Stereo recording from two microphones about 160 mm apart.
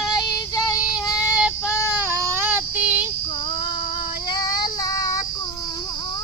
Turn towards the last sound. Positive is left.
turn(degrees=25)  # may be behind; listen again after turning